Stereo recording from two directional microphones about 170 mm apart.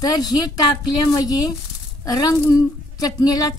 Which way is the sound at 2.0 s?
20° left (ahead or behind).